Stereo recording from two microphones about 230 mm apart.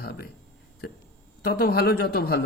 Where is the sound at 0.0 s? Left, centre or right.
Left.